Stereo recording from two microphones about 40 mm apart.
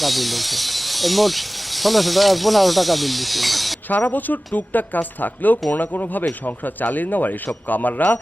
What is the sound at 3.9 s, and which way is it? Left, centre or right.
A man's voice, left.